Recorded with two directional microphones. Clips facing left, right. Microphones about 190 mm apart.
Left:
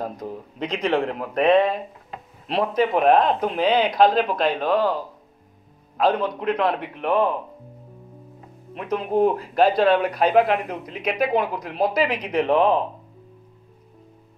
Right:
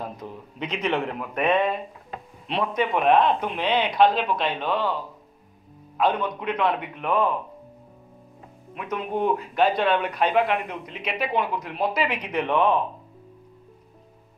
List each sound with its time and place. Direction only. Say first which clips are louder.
0.0 s speech: left 5 dB; 40° left (ahead or behind)
8.7 s speech: left 6 dB; 35° left (ahead or behind)